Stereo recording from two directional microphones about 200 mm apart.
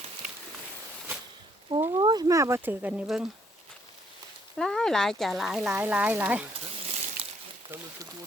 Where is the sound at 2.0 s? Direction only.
20° right (ahead or behind); by 3.2 s 5° right (ahead or behind).